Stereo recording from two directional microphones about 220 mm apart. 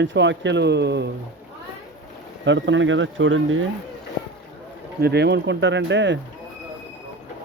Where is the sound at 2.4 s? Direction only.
55° right (ahead or behind).